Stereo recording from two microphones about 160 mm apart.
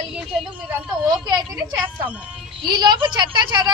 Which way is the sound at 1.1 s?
25° right (ahead or behind).